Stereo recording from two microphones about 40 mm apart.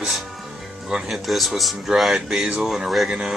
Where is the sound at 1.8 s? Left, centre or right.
Centre.